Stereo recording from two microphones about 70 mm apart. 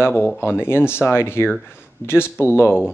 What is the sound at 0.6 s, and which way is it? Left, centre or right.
Speech, left.